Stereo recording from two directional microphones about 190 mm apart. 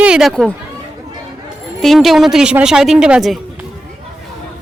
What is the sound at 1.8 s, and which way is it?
A woman's voice, centre (ahead or behind).